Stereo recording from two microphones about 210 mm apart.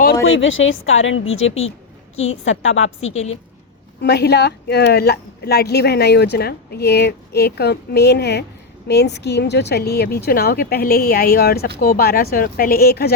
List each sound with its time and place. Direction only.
0.3 s a woman's voice: 65° left (ahead or behind)
4.0 s a woman's voice: 50° left (ahead or behind)